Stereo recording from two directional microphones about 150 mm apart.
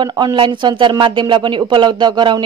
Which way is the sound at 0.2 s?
30° right (ahead or behind).